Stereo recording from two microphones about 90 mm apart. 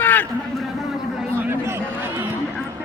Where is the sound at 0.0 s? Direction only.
20° left (ahead or behind).